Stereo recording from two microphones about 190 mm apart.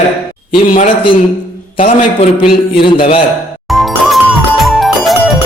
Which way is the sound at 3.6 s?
Centre (ahead or behind).